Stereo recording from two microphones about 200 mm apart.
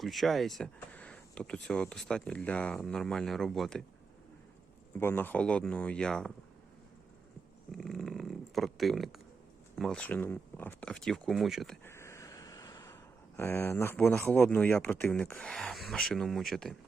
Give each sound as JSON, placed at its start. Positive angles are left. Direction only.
{"t": 0.0, "sound": "speech", "side_deg": 0}
{"t": 4.9, "sound": "speech", "side_deg": 10}
{"t": 7.7, "sound": "a sound", "side_deg": 0}
{"t": 9.7, "sound": "speech", "side_deg": 0}
{"t": 11.9, "sound": "speech", "side_deg": 15}